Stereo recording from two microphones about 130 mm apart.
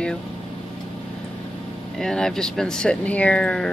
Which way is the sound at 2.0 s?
5° left (ahead or behind).